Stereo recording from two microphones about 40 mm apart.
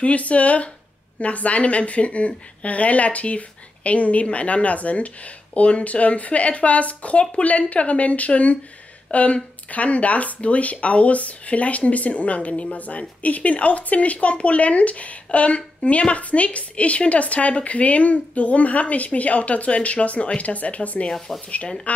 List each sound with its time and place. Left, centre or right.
0.0 s speech: left
21.3 s speech: centre
21.9 s speech: left